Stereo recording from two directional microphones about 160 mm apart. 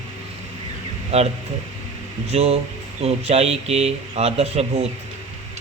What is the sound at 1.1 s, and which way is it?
Speech, 40° right (ahead or behind).